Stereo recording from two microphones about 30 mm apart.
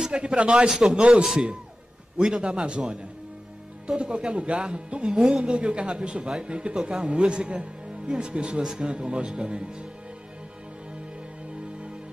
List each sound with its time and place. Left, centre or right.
0.1 s speech: right
0.7 s a man's voice: right
2.1 s speech: right